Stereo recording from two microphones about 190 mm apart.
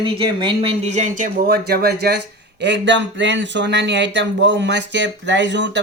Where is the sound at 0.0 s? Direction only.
25° right (ahead or behind).